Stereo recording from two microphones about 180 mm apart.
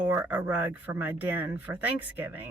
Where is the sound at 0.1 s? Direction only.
10° right (ahead or behind).